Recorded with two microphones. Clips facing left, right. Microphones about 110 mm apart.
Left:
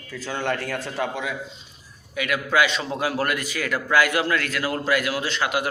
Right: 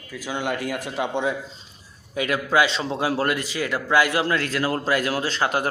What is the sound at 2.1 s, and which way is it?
A man's voice, 30° right (ahead or behind).